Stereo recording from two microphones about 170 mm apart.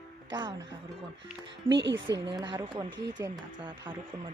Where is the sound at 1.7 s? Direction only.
90° right.